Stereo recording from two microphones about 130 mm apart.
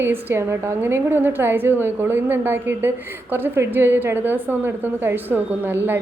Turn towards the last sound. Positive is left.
turn(degrees=-15)  # may be behind; listen again after turning